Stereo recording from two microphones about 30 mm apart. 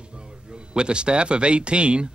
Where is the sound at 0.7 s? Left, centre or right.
Right.